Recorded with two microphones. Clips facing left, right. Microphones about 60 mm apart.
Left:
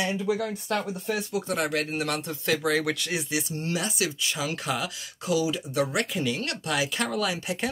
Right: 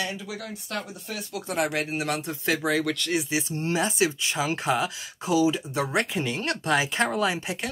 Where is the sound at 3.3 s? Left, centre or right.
Right.